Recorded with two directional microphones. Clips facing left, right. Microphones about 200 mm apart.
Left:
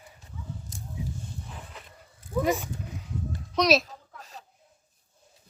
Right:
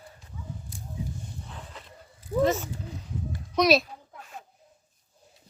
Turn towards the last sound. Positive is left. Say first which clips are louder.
# right 1 dB
turn(degrees=0)  # may be behind; listen again after turning